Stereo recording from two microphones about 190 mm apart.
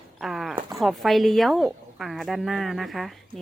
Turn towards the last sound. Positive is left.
turn(degrees=0)  # may be behind; listen again after turning